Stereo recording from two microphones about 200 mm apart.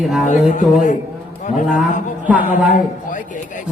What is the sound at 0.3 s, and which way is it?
Speech, 40° left (ahead or behind).